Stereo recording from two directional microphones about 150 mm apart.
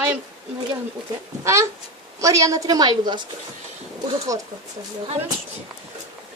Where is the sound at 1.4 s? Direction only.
20° right (ahead or behind).